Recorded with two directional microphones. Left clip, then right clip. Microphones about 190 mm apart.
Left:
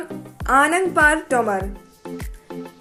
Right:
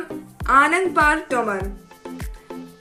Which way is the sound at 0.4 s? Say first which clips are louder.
Right 1 dB; 25° left (ahead or behind).